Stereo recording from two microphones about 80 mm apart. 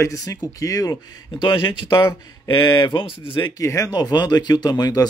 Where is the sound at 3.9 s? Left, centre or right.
Left.